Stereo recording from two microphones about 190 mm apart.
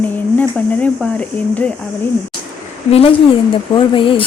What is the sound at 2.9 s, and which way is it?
A woman's voice, 30° left (ahead or behind).